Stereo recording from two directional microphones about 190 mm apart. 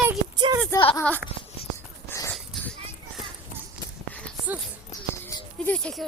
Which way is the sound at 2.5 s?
5° left (ahead or behind).